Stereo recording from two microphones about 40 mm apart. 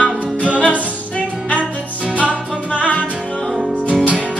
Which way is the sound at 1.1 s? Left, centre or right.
Left.